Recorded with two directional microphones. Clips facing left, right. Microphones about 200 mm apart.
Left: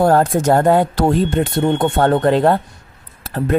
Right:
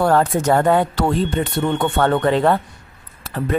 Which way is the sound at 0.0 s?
40° left (ahead or behind).